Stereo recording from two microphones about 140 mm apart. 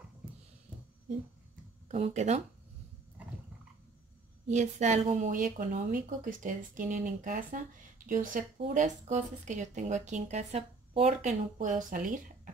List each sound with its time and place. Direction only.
1.9 s speech: 50° right (ahead or behind)
4.5 s speech: 55° right (ahead or behind); by 8.5 s 70° right (ahead or behind)
8.7 s speech: 60° right (ahead or behind)